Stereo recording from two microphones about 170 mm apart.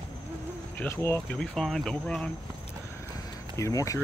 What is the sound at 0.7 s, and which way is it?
Speech, 10° left (ahead or behind).